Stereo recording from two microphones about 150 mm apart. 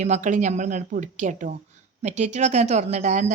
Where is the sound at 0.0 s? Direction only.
55° right (ahead or behind).